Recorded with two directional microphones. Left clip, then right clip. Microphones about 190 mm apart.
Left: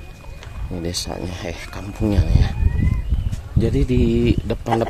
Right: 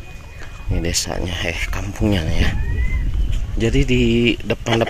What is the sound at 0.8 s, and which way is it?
Speech, 10° right (ahead or behind).